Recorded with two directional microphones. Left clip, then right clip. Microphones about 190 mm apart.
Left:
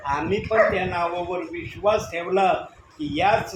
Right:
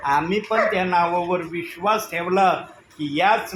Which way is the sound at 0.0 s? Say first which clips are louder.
Right 4 dB; 35° right (ahead or behind).